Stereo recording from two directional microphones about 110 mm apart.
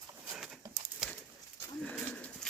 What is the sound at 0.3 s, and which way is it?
Dog, centre (ahead or behind).